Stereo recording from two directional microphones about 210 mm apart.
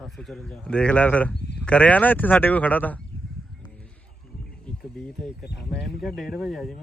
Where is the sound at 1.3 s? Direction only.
50° left (ahead or behind).